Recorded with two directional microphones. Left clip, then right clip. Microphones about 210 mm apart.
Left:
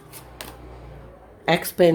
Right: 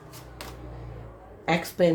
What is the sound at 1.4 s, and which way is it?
Speech, 55° left (ahead or behind).